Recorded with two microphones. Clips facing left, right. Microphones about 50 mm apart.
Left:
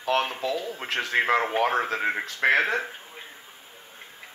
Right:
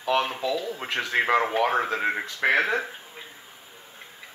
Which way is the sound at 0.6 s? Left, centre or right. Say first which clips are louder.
Right 1 dB; left.